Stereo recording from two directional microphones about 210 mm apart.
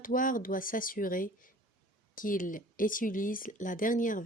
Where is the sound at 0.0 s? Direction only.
40° left (ahead or behind).